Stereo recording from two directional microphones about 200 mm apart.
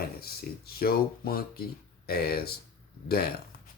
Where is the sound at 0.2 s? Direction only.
50° left (ahead or behind).